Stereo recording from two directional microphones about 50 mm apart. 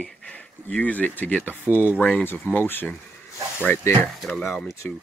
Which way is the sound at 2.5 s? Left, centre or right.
Left.